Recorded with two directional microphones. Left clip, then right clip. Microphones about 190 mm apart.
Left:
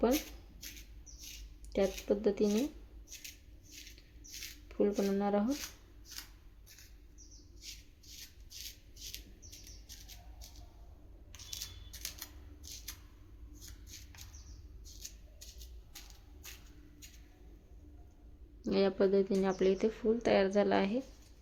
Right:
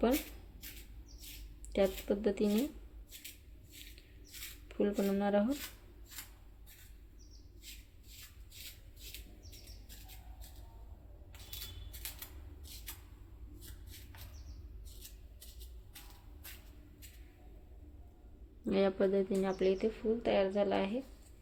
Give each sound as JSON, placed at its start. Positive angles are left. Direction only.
{"t": 1.7, "sound": "speech", "side_deg": 5}
{"t": 4.7, "sound": "speech", "side_deg": 0}
{"t": 18.6, "sound": "speech", "side_deg": 10}